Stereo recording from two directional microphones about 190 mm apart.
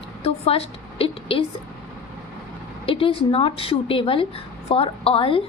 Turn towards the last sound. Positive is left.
turn(degrees=30)  # may be behind; listen again after turning